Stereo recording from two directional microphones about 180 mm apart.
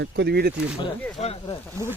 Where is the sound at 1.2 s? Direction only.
35° left (ahead or behind).